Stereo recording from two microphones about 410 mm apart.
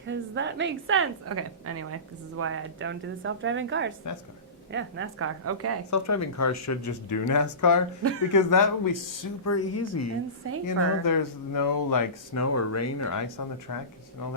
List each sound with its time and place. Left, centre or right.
0.0 s a woman's voice: right
5.9 s speech: left
9.4 s speech: left
10.7 s speech: left